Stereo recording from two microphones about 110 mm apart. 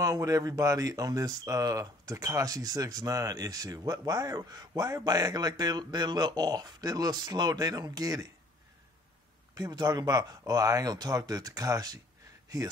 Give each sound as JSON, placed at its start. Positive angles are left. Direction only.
{"t": 0.0, "sound": "speech", "side_deg": -30}
{"t": 9.6, "sound": "speech", "side_deg": -40}